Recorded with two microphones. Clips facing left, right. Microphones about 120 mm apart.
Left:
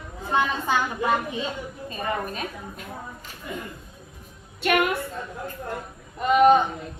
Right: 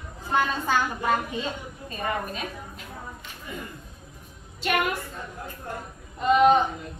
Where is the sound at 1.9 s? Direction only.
45° left (ahead or behind).